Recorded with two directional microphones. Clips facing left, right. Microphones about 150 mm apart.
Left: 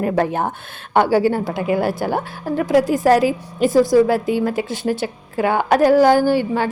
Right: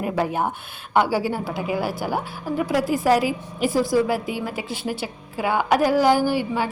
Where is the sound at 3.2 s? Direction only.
10° right (ahead or behind).